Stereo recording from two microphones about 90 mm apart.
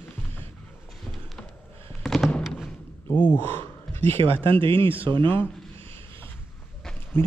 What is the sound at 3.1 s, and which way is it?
Speech, 20° left (ahead or behind).